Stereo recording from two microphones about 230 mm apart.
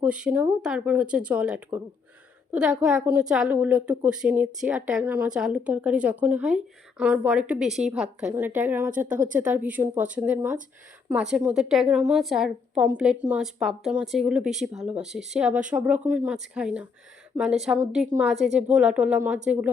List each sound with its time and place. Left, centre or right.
0.0 s a woman's voice: centre
9.0 s a woman's voice: right
9.3 s a woman's voice: centre